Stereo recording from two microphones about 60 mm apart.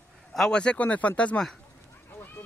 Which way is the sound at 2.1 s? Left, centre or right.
Left.